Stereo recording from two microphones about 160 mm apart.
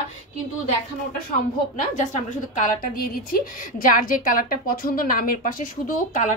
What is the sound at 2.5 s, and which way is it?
A woman's voice, 55° left (ahead or behind).